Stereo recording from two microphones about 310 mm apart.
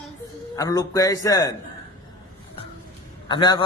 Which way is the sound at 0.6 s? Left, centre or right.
Centre.